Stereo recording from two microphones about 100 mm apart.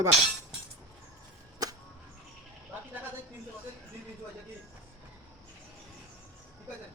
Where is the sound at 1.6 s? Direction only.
40° right (ahead or behind).